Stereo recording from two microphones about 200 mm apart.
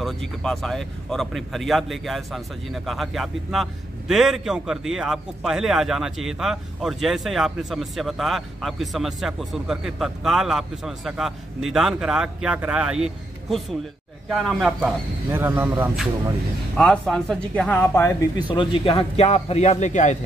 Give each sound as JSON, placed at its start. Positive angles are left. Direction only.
{"t": 0.0, "sound": "a man's voice", "side_deg": 0}
{"t": 15.3, "sound": "speech", "side_deg": -10}
{"t": 16.7, "sound": "a man's voice", "side_deg": 5}
{"t": 18.5, "sound": "a man's voice", "side_deg": 25}